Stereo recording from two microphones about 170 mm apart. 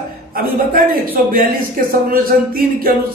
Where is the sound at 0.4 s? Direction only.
60° right (ahead or behind).